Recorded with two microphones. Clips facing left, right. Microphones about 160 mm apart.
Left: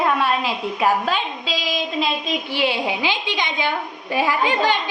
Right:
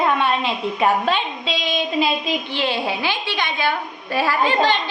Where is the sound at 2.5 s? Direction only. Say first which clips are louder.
Left 3 dB; 10° left (ahead or behind).